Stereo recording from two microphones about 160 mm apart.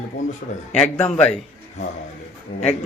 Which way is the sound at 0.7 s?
5° left (ahead or behind).